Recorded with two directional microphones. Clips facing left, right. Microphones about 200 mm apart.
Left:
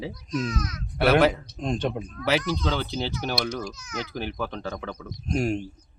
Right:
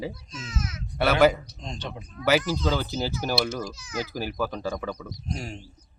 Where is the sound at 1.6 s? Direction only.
50° left (ahead or behind).